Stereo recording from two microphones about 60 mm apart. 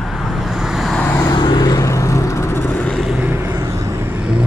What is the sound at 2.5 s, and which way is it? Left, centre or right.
Vehicle, left.